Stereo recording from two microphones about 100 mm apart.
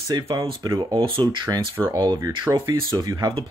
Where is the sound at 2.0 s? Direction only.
40° right (ahead or behind).